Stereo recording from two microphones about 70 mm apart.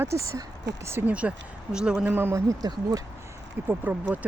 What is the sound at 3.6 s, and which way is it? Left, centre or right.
Speech, right.